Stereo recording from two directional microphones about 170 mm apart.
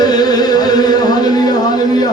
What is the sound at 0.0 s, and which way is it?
Music, 25° left (ahead or behind).